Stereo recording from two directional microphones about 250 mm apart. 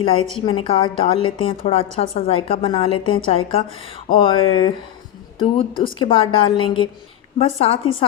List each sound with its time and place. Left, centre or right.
0.3 s a woman's voice: left